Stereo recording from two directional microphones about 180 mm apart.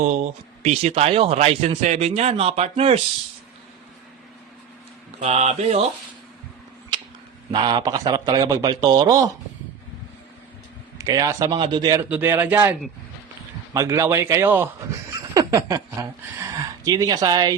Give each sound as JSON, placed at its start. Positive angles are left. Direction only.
{"t": 0.6, "sound": "a man's voice", "side_deg": -40}
{"t": 5.2, "sound": "a man's voice", "side_deg": -40}
{"t": 7.5, "sound": "a man's voice", "side_deg": -25}
{"t": 10.9, "sound": "a man's voice", "side_deg": -20}
{"t": 12.0, "sound": "a man's voice", "side_deg": -10}
{"t": 13.7, "sound": "a man's voice", "side_deg": -15}